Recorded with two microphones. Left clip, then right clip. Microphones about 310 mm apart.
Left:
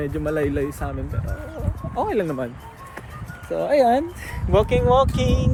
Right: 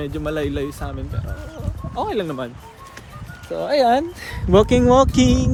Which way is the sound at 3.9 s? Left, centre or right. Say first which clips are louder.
Right 2 dB; right.